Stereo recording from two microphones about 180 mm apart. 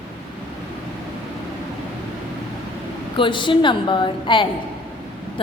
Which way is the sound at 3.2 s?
25° left (ahead or behind).